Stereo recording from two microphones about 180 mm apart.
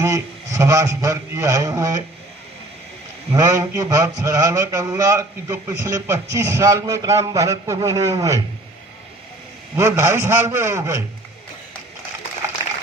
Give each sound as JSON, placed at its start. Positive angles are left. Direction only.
{"t": 0.0, "sound": "a man's voice", "side_deg": -15}
{"t": 3.3, "sound": "a man's voice", "side_deg": -20}
{"t": 9.7, "sound": "a man's voice", "side_deg": -15}